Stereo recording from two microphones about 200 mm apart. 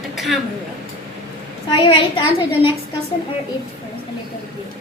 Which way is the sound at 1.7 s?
25° left (ahead or behind).